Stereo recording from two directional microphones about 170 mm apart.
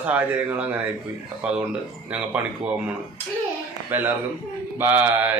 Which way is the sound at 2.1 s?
5° right (ahead or behind).